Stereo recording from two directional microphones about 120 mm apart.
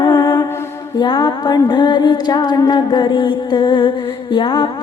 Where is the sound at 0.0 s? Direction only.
45° left (ahead or behind).